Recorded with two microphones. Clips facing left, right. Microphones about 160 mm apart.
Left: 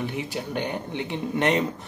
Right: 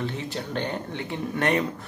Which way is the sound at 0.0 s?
15° left (ahead or behind).